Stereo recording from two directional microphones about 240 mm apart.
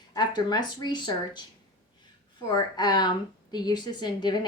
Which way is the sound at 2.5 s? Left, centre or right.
Centre.